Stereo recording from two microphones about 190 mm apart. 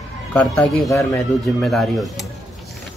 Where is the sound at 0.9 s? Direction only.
15° left (ahead or behind).